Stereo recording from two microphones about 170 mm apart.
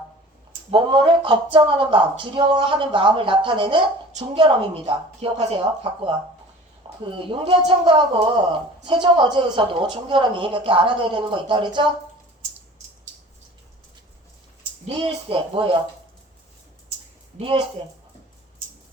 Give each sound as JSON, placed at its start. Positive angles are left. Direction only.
{"t": 0.7, "sound": "speech", "side_deg": -30}
{"t": 6.8, "sound": "a sound", "side_deg": -30}
{"t": 7.2, "sound": "speech", "side_deg": -30}
{"t": 14.8, "sound": "speech", "side_deg": -30}
{"t": 17.3, "sound": "speech", "side_deg": -30}